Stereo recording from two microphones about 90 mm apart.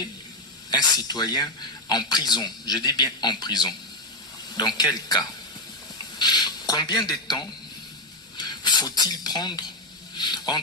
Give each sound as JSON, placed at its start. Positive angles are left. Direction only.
{"t": 0.7, "sound": "a man's voice", "side_deg": 50}